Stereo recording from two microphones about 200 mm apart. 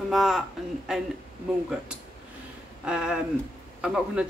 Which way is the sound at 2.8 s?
5° right (ahead or behind).